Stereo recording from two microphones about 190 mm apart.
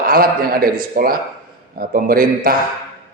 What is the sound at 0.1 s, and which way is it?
A man's voice, 50° right (ahead or behind).